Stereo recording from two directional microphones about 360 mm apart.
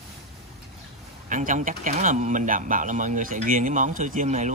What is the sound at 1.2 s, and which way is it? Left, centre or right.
Speech, right.